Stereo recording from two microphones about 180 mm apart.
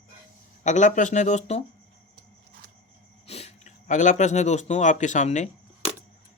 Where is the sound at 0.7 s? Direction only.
40° left (ahead or behind).